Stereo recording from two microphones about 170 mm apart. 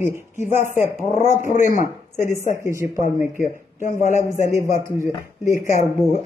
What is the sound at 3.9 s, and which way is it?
Speech, 45° left (ahead or behind).